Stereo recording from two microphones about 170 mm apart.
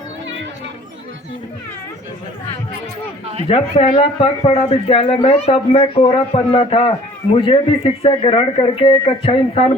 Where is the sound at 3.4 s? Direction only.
35° left (ahead or behind).